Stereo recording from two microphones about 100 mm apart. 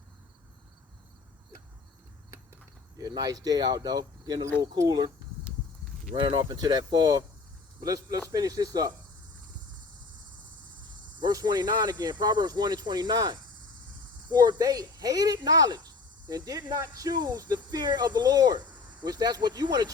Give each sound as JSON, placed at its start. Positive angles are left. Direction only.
{"t": 3.0, "sound": "speech", "side_deg": -40}
{"t": 6.1, "sound": "speech", "side_deg": -50}
{"t": 11.2, "sound": "speech", "side_deg": -40}